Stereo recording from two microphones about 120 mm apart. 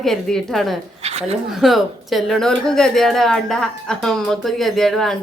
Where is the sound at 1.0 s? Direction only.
60° right (ahead or behind).